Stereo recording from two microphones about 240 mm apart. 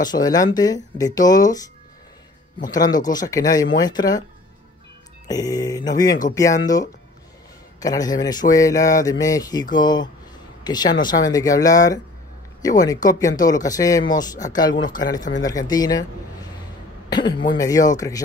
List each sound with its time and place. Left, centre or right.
0.0 s speech: centre
5.3 s speech: centre
17.1 s speech: centre